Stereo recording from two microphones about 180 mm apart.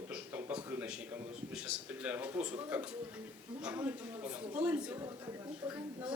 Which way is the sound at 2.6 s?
10° right (ahead or behind).